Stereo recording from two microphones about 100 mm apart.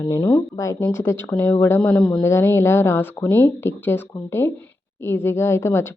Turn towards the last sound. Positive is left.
turn(degrees=25)  # may be behind; listen again after turning